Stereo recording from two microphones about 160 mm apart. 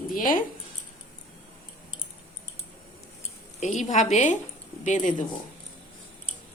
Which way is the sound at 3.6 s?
50° left (ahead or behind).